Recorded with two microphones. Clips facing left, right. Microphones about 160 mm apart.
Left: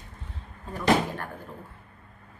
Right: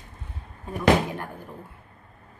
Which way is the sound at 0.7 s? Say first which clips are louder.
Right 3 dB; 15° right (ahead or behind).